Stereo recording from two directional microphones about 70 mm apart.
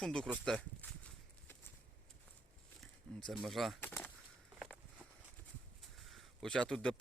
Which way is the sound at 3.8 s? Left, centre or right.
Left.